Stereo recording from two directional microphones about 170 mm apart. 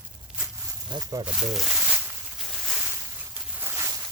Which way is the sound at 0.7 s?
20° right (ahead or behind).